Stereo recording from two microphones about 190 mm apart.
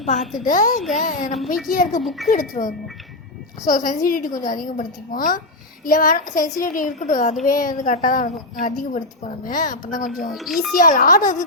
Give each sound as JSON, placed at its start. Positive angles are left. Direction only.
{"t": 0.0, "sound": "a woman's voice", "side_deg": 40}
{"t": 2.0, "sound": "a child's voice", "side_deg": 0}
{"t": 2.3, "sound": "a woman's voice", "side_deg": 45}
{"t": 10.2, "sound": "a child's voice", "side_deg": 0}
{"t": 10.8, "sound": "a woman's voice", "side_deg": 45}